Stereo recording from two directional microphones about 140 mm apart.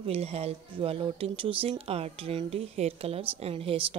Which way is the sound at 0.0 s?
45° right (ahead or behind).